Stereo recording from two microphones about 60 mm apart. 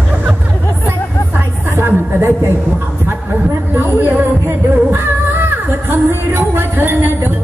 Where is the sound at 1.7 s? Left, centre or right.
Right.